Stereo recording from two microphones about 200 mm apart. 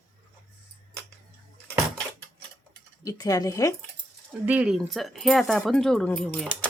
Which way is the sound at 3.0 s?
15° left (ahead or behind).